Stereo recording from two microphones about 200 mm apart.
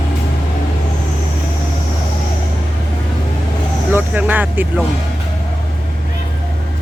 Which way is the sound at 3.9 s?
10° right (ahead or behind).